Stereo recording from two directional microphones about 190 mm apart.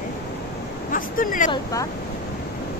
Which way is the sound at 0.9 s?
45° left (ahead or behind).